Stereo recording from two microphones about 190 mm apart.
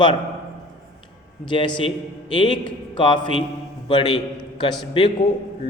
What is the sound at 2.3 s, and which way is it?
A man's voice, 25° left (ahead or behind).